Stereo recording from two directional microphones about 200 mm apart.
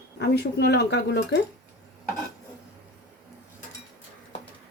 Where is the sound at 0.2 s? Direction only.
55° left (ahead or behind).